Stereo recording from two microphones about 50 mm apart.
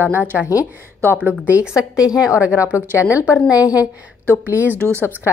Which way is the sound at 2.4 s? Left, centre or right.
Right.